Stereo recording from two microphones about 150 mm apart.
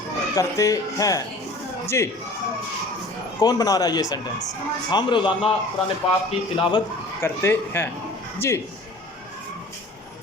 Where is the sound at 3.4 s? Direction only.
25° left (ahead or behind).